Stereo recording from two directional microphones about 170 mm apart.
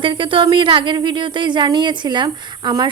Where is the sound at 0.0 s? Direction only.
30° right (ahead or behind).